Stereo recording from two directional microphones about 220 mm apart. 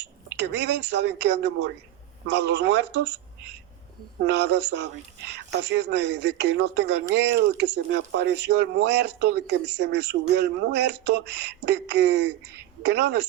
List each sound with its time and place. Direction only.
0.3 s speech: 50° right (ahead or behind)
4.3 s speech: 50° right (ahead or behind)